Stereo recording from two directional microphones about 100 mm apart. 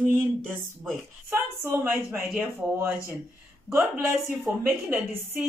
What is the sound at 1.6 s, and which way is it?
Speech, 25° right (ahead or behind).